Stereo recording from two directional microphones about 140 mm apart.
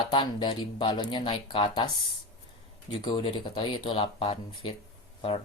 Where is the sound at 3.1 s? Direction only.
35° left (ahead or behind).